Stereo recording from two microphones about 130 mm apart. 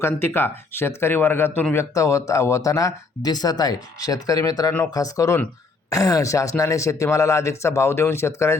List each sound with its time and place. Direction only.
0.0 s speech: 20° left (ahead or behind)